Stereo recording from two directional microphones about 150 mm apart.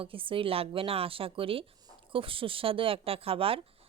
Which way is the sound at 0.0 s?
35° right (ahead or behind).